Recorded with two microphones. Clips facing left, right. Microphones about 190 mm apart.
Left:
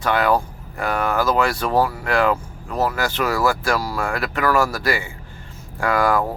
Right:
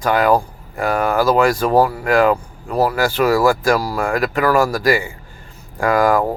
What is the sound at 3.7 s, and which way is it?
Speech, 40° right (ahead or behind).